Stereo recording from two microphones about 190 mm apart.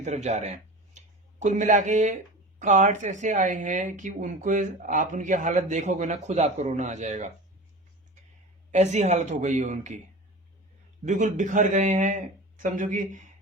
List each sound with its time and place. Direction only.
0.0 s speech: 35° right (ahead or behind)
8.7 s speech: 35° right (ahead or behind)
11.0 s speech: 40° right (ahead or behind)